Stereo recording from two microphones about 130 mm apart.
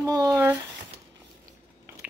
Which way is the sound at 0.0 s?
30° right (ahead or behind).